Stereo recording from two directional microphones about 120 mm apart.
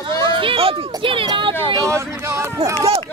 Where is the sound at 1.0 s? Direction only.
45° right (ahead or behind).